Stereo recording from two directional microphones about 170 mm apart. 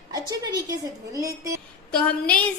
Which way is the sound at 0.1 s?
20° right (ahead or behind).